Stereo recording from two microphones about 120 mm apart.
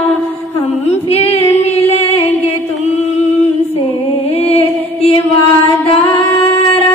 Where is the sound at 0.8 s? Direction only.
55° left (ahead or behind).